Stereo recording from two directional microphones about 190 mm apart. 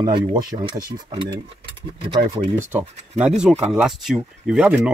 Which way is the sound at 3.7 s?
Centre (ahead or behind).